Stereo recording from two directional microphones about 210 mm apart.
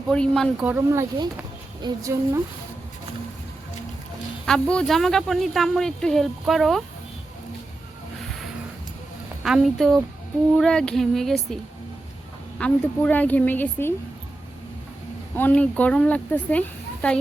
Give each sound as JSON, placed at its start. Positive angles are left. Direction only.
{"t": 0.1, "sound": "speech", "side_deg": 5}
{"t": 0.6, "sound": "speech", "side_deg": -10}
{"t": 4.4, "sound": "speech", "side_deg": 5}
{"t": 9.4, "sound": "speech", "side_deg": 0}
{"t": 12.5, "sound": "speech", "side_deg": 5}
{"t": 15.4, "sound": "speech", "side_deg": 5}